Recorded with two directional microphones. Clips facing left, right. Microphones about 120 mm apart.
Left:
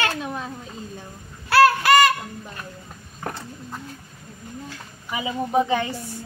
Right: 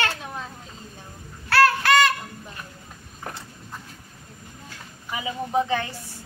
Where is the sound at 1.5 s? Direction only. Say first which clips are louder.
Left 3 dB; 5° left (ahead or behind).